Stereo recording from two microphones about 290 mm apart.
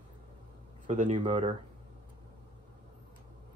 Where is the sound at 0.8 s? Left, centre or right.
Right.